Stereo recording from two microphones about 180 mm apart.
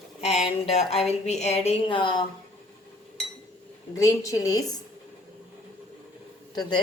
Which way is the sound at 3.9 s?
20° left (ahead or behind).